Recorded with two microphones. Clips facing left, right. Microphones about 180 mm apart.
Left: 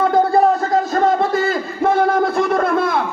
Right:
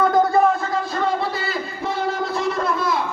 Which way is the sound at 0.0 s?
30° left (ahead or behind).